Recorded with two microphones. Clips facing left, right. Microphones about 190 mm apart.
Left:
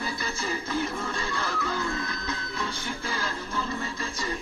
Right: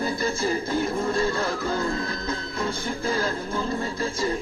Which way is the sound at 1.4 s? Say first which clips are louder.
Right 5 dB; 30° right (ahead or behind).